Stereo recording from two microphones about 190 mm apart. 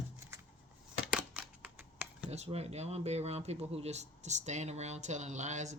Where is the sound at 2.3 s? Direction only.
35° right (ahead or behind).